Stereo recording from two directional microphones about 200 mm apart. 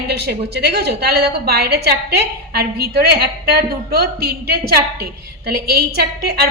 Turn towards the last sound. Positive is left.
turn(degrees=-50)  # may be behind; listen again after turning